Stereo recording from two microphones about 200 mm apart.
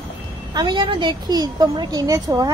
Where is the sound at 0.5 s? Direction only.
25° right (ahead or behind).